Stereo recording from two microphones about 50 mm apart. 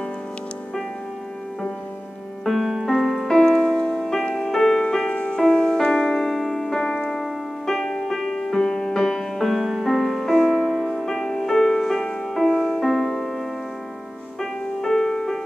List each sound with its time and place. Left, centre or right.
2.4 s music: centre
3.3 s music: centre
5.4 s piano: centre
9.8 s music: centre
14.4 s music: centre